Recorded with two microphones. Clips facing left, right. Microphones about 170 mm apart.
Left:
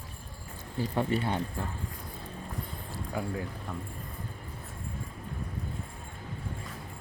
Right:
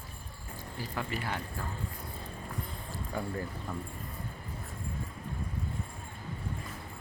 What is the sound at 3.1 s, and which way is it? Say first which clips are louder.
Speech: left 2 dB; 10° left (ahead or behind).